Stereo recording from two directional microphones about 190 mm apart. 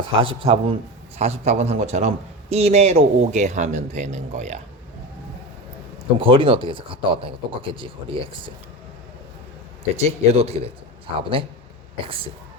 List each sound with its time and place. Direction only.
0.2 s a man's voice: 30° right (ahead or behind)
6.1 s speech: 30° right (ahead or behind)
9.9 s a man's voice: 35° right (ahead or behind)